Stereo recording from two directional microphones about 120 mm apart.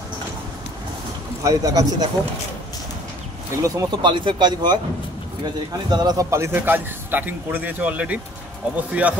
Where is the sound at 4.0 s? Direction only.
40° right (ahead or behind).